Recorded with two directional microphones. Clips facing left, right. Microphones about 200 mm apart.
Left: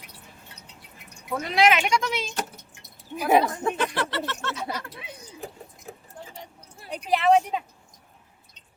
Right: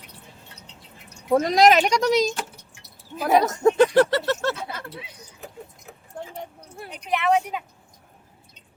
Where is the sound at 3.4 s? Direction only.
40° right (ahead or behind).